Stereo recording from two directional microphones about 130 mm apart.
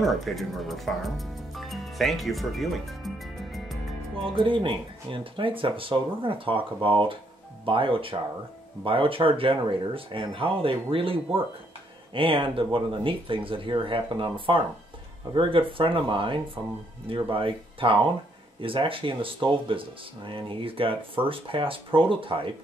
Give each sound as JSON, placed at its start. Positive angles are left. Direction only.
{"t": 0.0, "sound": "speech", "side_deg": 0}
{"t": 4.2, "sound": "speech", "side_deg": -40}